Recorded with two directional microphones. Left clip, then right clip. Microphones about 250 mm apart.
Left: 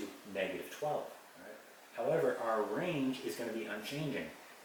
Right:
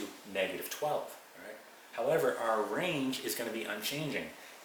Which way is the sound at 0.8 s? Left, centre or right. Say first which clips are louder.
Right 3 dB; left.